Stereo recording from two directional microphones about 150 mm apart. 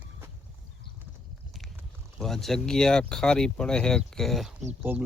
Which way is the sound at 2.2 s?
Centre (ahead or behind).